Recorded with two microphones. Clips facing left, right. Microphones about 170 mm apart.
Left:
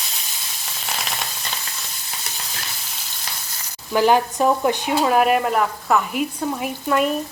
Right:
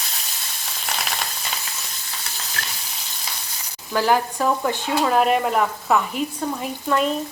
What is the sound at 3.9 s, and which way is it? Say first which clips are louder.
Speech: left 3 dB; 20° left (ahead or behind).